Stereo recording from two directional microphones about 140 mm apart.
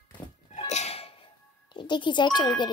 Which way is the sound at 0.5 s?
50° left (ahead or behind).